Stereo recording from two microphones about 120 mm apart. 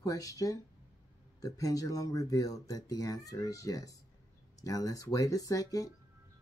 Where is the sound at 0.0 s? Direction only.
30° left (ahead or behind).